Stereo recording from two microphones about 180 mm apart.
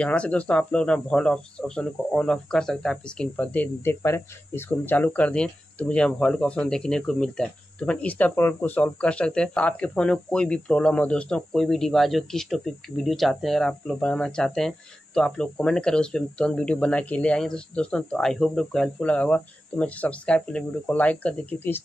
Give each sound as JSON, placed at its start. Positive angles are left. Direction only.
{"t": 0.0, "sound": "speech", "side_deg": 5}